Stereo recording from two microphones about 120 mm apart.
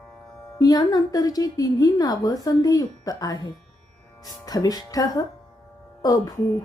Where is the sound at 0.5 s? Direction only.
30° left (ahead or behind).